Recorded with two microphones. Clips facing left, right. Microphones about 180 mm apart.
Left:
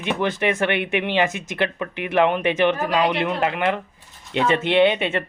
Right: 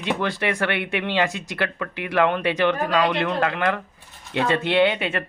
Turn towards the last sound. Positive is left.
turn(degrees=25)  # may be behind; listen again after turning